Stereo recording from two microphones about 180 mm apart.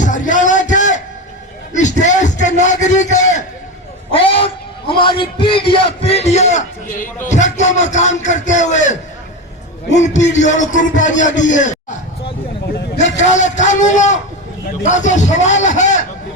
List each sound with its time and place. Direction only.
0.0 s a sound: 45° left (ahead or behind)
4.1 s a man's voice: 30° left (ahead or behind)
13.0 s a man's voice: 40° left (ahead or behind)